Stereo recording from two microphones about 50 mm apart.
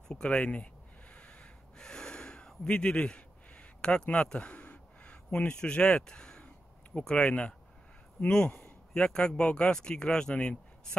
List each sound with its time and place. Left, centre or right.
0.1 s speech: centre
1.1 s a sound: left
7.0 s a man's voice: centre